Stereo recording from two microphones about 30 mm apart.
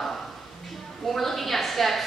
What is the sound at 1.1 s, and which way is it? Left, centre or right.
Speech, centre.